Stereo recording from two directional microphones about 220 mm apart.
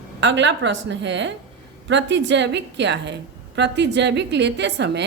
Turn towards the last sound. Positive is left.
turn(degrees=-50)  # may be behind; listen again after turning